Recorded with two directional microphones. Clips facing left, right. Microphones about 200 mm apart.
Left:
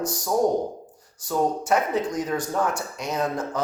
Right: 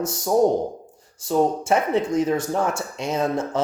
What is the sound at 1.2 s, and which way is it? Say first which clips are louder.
Speech: right 4 dB; 25° right (ahead or behind).